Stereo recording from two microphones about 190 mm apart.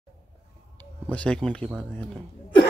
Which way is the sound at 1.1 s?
5° left (ahead or behind).